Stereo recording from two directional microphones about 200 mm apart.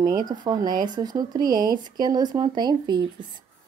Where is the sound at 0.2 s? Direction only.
20° right (ahead or behind).